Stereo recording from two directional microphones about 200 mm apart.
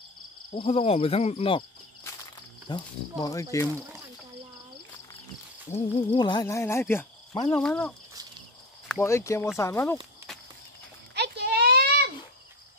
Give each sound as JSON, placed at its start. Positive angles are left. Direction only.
{"t": 0.5, "sound": "cricket", "side_deg": 30}
{"t": 2.7, "sound": "cricket", "side_deg": 20}
{"t": 5.7, "sound": "cricket", "side_deg": 30}
{"t": 7.4, "sound": "speech", "side_deg": 5}
{"t": 9.6, "sound": "cricket", "side_deg": 15}
{"t": 11.1, "sound": "a sound", "side_deg": -55}